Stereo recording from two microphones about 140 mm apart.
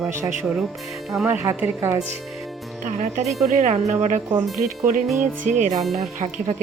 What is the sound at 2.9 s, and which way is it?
Speech, 60° right (ahead or behind).